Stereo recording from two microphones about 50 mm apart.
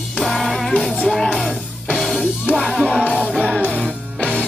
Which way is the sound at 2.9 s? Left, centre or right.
Centre.